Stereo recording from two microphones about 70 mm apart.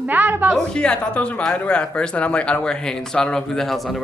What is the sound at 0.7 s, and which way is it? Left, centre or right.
A man's voice, centre.